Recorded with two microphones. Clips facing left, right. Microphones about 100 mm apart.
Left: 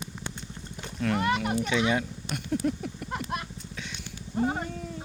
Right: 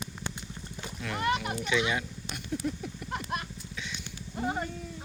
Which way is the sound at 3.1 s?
40° left (ahead or behind).